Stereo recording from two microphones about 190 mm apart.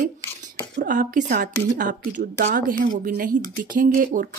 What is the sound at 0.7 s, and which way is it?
Speech, 45° right (ahead or behind).